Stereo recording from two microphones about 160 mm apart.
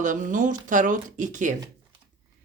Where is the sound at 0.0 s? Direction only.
55° right (ahead or behind).